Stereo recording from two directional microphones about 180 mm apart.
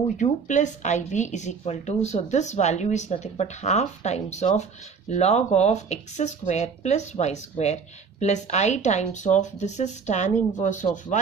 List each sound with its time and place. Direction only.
0.2 s speech: 40° left (ahead or behind)